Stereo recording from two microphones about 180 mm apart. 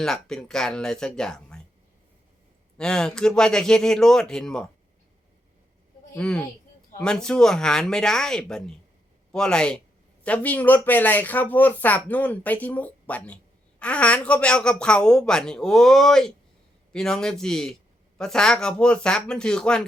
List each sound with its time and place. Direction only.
0.0 s speech: 5° left (ahead or behind)
2.7 s speech: 5° left (ahead or behind)
6.1 s speech: 5° left (ahead or behind)